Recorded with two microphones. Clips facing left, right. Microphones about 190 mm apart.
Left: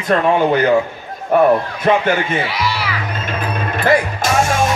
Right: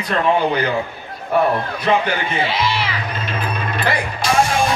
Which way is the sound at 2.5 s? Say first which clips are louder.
Even; 25° right (ahead or behind).